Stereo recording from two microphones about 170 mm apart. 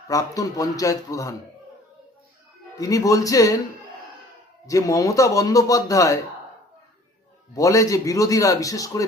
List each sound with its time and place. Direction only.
0.1 s a man's voice: 20° left (ahead or behind)
2.7 s a man's voice: 20° left (ahead or behind)
4.6 s a man's voice: 20° left (ahead or behind)
7.5 s a man's voice: 20° left (ahead or behind)